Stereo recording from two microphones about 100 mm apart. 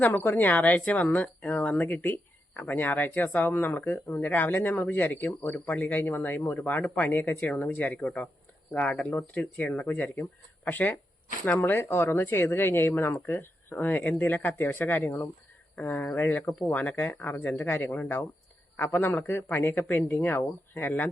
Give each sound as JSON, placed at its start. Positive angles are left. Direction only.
{"t": 0.0, "sound": "speech", "side_deg": 20}